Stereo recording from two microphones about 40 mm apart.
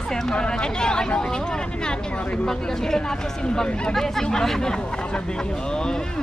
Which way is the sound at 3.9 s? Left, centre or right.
Centre.